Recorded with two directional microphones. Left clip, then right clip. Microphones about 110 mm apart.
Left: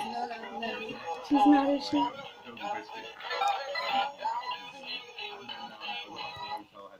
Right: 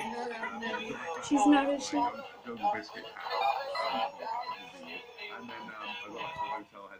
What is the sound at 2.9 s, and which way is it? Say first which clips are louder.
Music: even; 20° left (ahead or behind).